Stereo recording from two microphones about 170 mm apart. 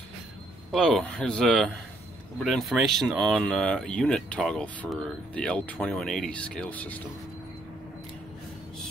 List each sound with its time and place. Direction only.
0.7 s speech: centre (ahead or behind)